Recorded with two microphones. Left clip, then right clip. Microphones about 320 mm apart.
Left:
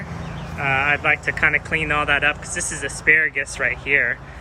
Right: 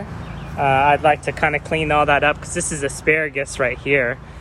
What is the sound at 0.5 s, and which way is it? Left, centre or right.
Speech, right.